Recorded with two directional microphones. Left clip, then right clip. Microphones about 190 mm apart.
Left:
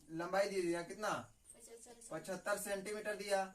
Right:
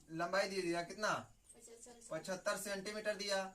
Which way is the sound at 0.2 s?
Centre (ahead or behind).